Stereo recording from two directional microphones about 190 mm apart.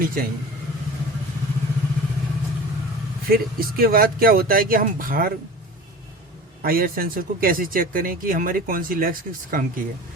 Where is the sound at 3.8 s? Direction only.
50° right (ahead or behind).